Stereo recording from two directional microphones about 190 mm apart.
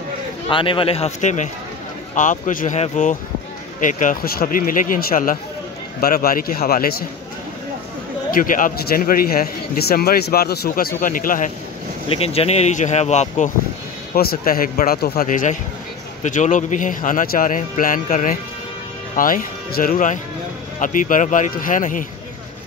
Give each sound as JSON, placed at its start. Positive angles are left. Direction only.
{"t": 0.5, "sound": "speech", "side_deg": 25}
{"t": 8.3, "sound": "speech", "side_deg": 45}
{"t": 12.1, "sound": "speech", "side_deg": 30}
{"t": 14.1, "sound": "speech", "side_deg": 50}